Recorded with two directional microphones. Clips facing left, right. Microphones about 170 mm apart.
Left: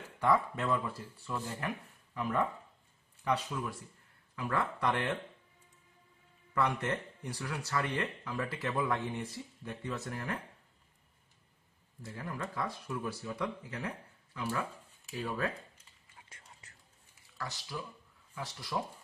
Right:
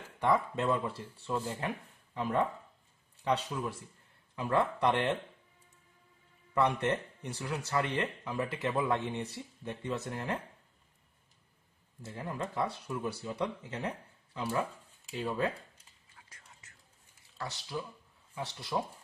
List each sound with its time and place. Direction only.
0.2 s speech: 20° right (ahead or behind)
3.5 s speech: 25° right (ahead or behind)
6.5 s speech: 25° right (ahead or behind)
12.0 s speech: 20° right (ahead or behind)
16.3 s whispering: 25° left (ahead or behind)
17.4 s speech: 25° right (ahead or behind)